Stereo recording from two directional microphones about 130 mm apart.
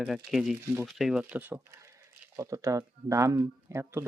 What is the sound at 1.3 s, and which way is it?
Speech, 15° right (ahead or behind).